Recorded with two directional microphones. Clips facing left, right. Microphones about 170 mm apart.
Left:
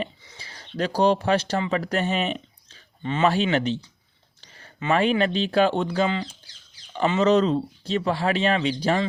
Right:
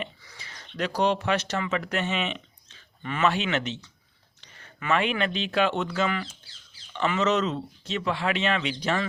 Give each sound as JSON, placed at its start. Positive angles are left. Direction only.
{"t": 0.0, "sound": "speech", "side_deg": 30}